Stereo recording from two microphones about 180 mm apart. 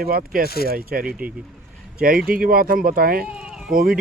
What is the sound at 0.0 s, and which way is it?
Speech, 55° right (ahead or behind).